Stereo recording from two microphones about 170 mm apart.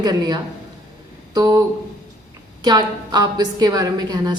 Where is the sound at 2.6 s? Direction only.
25° right (ahead or behind).